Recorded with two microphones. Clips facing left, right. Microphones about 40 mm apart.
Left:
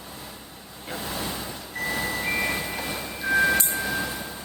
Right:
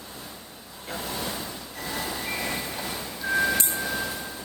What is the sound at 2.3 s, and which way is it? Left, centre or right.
Vehicle, left.